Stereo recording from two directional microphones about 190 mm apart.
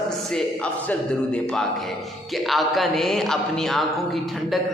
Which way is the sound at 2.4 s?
Centre (ahead or behind).